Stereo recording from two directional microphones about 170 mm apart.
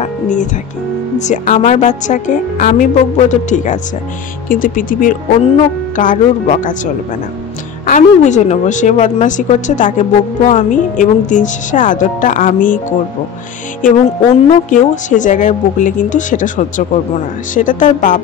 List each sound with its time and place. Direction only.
0.0 s music: 45° left (ahead or behind)
1.1 s a woman's voice: 45° left (ahead or behind)
7.8 s a woman's voice: 45° left (ahead or behind)
14.5 s a woman's voice: 45° left (ahead or behind)